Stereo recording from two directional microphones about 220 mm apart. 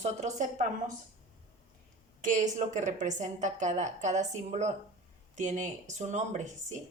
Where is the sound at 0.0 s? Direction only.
30° right (ahead or behind).